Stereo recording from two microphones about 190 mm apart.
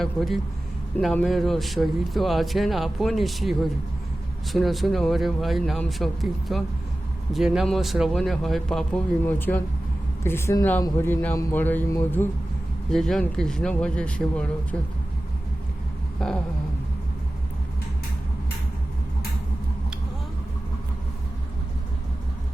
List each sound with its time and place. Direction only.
0.0 s a man's voice: centre (ahead or behind)
16.2 s a man's voice: 5° left (ahead or behind)